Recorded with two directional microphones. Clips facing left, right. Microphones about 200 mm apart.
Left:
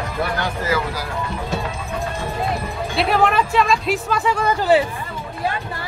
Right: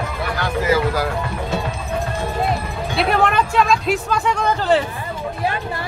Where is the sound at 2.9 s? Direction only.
Centre (ahead or behind).